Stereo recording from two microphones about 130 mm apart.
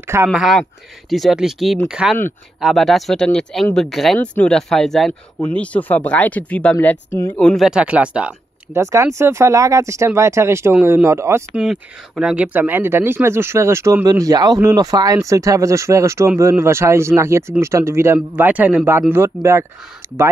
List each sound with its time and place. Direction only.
0.0 s a sound: 20° right (ahead or behind)
0.3 s speech: centre (ahead or behind); by 7.3 s 20° left (ahead or behind)
7.3 s speech: 5° left (ahead or behind)
8.7 s speech: 20° right (ahead or behind)
11.5 s speech: 5° right (ahead or behind)